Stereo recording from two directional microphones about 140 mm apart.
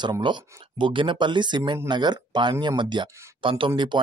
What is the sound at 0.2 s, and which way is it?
Speech, 35° right (ahead or behind).